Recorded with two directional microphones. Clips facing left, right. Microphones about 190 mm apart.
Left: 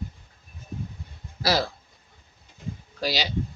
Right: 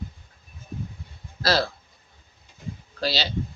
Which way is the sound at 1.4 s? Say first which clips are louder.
Right 1 dB; 15° left (ahead or behind).